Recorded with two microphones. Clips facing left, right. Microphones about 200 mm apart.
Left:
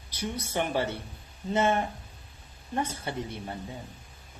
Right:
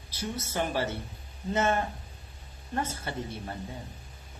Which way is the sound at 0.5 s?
15° left (ahead or behind).